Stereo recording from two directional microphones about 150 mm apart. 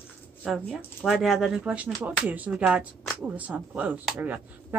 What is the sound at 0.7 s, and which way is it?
Speech, centre (ahead or behind).